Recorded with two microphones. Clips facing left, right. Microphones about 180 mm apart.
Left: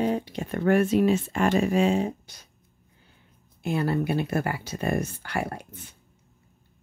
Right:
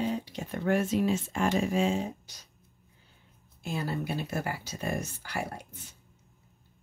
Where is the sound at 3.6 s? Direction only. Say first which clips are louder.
Left 8 dB; 60° left (ahead or behind).